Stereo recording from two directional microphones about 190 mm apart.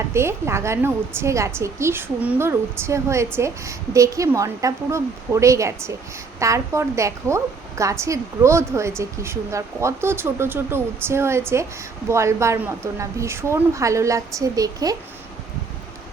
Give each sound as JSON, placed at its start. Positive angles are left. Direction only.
{"t": 0.1, "sound": "a woman's voice", "side_deg": -15}